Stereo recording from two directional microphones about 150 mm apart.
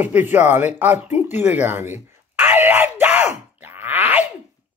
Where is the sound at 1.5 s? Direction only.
15° right (ahead or behind).